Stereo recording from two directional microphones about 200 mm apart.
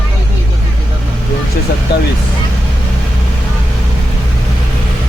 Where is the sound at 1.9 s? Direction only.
50° left (ahead or behind).